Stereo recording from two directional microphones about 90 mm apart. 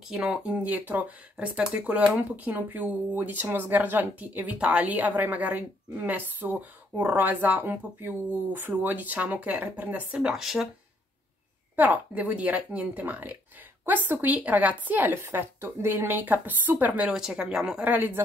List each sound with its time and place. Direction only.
0.1 s speech: 10° right (ahead or behind)
10.1 s speech: 5° right (ahead or behind)
11.7 s speech: 20° right (ahead or behind)
17.8 s speech: 20° right (ahead or behind)